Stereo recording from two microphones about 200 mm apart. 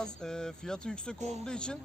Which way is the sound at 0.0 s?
5° left (ahead or behind).